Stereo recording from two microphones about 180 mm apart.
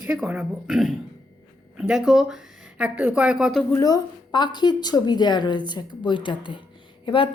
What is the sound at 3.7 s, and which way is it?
A woman's voice, 20° left (ahead or behind).